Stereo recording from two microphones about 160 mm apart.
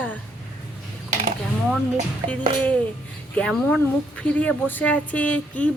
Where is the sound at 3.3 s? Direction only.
5° left (ahead or behind).